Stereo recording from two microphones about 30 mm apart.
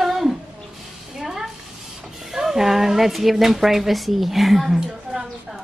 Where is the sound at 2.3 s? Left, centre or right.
Centre.